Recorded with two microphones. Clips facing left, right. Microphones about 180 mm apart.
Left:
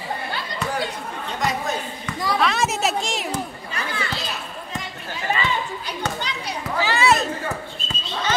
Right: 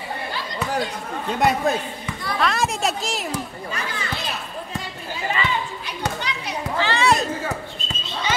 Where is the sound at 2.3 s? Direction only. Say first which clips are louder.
Right 1 dB; centre (ahead or behind).